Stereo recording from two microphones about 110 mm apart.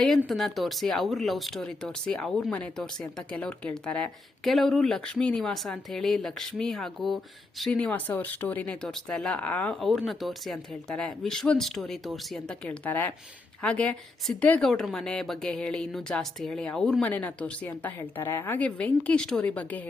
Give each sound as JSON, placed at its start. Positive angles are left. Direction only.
{"t": 0.3, "sound": "speech", "side_deg": 0}
{"t": 4.4, "sound": "a woman's voice", "side_deg": 0}
{"t": 10.1, "sound": "speech", "side_deg": 0}
{"t": 12.6, "sound": "a woman's voice", "side_deg": 15}